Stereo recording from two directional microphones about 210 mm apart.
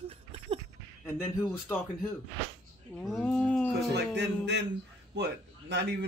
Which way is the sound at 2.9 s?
5° left (ahead or behind).